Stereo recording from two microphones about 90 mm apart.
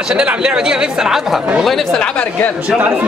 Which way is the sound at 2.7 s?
15° right (ahead or behind).